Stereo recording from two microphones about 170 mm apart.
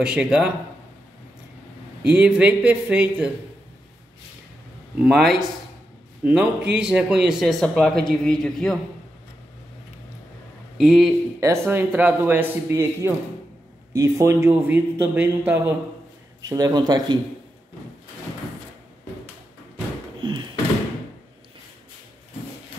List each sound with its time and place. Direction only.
0.0 s speech: 5° right (ahead or behind)
2.0 s a man's voice: 5° right (ahead or behind)
4.9 s a man's voice: 5° right (ahead or behind)
10.8 s speech: centre (ahead or behind)
11.3 s a man's voice: 15° right (ahead or behind)
20.2 s a sound: 30° right (ahead or behind)